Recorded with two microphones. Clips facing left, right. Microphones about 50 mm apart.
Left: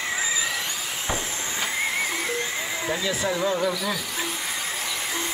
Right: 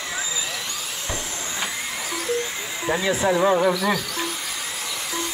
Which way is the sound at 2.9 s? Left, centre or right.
Right.